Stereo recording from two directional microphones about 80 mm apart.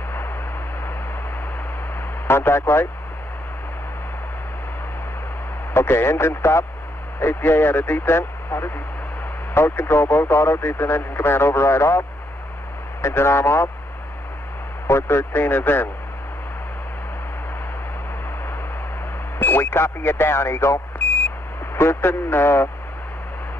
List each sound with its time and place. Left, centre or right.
2.0 s radio: left
5.7 s speech: left
13.0 s speech: left
14.9 s speech: left
19.3 s speech: left